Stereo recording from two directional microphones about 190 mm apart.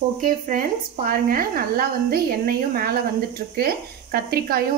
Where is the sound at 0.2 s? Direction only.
45° right (ahead or behind).